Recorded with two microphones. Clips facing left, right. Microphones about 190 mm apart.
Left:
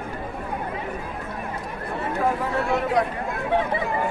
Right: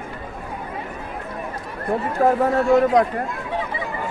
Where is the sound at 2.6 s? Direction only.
65° left (ahead or behind).